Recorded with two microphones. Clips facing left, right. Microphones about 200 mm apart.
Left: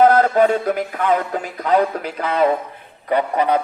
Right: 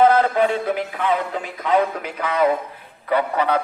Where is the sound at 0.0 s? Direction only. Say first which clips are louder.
Left 3 dB; 45° left (ahead or behind).